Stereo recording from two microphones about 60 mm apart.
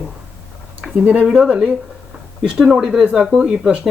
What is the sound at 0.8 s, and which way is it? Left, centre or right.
Speech, centre.